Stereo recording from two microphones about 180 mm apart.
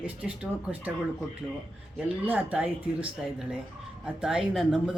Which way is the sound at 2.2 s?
10° right (ahead or behind).